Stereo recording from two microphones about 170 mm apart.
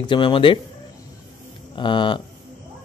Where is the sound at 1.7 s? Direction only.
30° left (ahead or behind).